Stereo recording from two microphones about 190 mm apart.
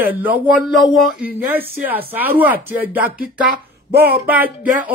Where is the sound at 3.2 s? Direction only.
50° right (ahead or behind).